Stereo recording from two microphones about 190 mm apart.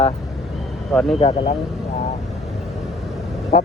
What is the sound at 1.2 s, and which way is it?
Speech, 35° left (ahead or behind).